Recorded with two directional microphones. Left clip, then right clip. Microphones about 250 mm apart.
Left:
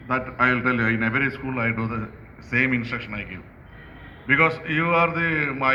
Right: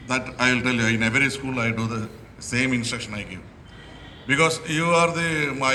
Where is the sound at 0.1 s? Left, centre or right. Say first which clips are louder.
Left 1 dB; right.